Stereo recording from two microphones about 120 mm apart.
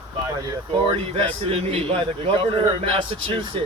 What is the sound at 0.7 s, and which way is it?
Speech, 50° right (ahead or behind).